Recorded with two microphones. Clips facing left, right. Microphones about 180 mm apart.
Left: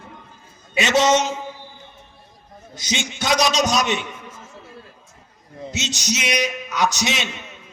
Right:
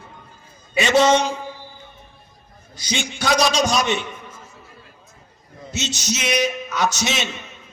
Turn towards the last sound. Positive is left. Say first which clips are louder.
# even
turn(degrees=15)  # may be behind; listen again after turning